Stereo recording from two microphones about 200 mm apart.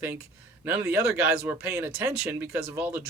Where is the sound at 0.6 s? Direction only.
10° right (ahead or behind).